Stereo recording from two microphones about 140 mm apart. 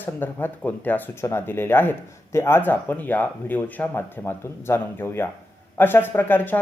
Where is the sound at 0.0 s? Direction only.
15° left (ahead or behind).